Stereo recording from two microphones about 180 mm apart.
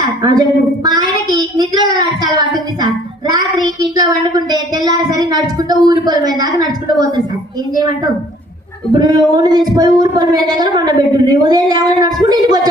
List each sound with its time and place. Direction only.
0.2 s a woman's voice: 20° right (ahead or behind)
0.9 s a sound: 20° right (ahead or behind)
7.8 s speech: 20° right (ahead or behind)